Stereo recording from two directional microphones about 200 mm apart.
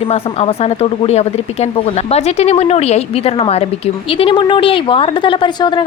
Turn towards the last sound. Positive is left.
turn(degrees=25)  # may be behind; listen again after turning